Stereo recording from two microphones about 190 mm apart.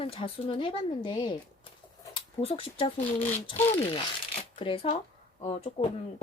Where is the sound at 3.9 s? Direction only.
25° left (ahead or behind).